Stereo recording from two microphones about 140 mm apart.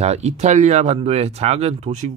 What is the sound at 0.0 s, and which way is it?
Speech, 50° right (ahead or behind).